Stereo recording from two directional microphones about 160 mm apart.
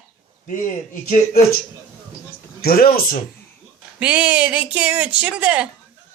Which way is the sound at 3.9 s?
10° right (ahead or behind).